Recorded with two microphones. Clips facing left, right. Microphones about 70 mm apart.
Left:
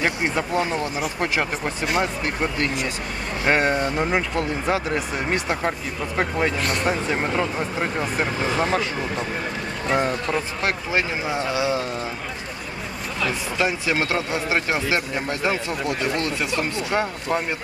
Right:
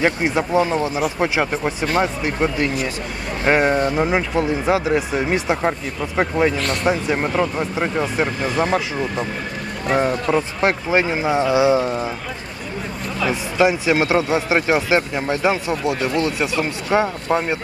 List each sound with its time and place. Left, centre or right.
0.2 s speech: centre
13.6 s speech: centre